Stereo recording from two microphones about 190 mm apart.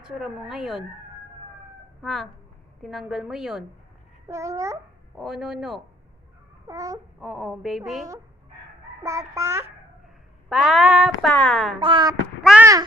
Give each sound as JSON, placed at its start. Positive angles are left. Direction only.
{"t": 0.0, "sound": "a woman's voice", "side_deg": -5}
{"t": 2.0, "sound": "a woman's voice", "side_deg": 0}
{"t": 4.3, "sound": "child singing", "side_deg": -15}
{"t": 5.1, "sound": "a woman's voice", "side_deg": 0}
{"t": 6.7, "sound": "child singing", "side_deg": -15}
{"t": 7.2, "sound": "a woman's voice", "side_deg": 0}
{"t": 9.0, "sound": "child singing", "side_deg": -15}
{"t": 10.5, "sound": "a woman's voice", "side_deg": 0}
{"t": 11.8, "sound": "speech", "side_deg": -25}
{"t": 12.5, "sound": "a sound", "side_deg": -5}